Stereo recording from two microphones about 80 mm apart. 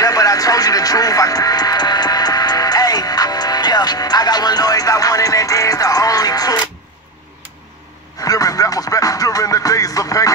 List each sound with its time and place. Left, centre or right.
0.0 s music: left
8.2 s music: left